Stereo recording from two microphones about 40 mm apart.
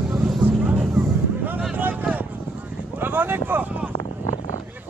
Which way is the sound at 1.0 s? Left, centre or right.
Right.